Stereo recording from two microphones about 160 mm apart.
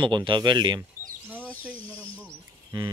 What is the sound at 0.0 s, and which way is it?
Speech, 30° right (ahead or behind).